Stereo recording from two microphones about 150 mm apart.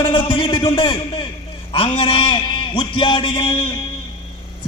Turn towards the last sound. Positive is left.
turn(degrees=35)  # may be behind; listen again after turning